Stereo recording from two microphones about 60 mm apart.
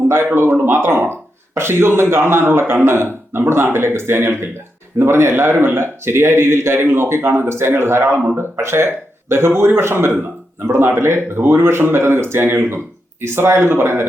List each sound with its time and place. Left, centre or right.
0.3 s a man's voice: right